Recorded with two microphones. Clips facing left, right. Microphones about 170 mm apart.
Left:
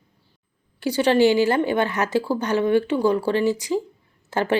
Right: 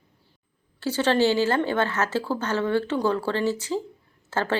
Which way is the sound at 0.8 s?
15° left (ahead or behind).